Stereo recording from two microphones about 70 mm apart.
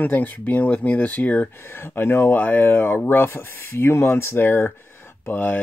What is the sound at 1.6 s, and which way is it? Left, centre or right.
Speech, left.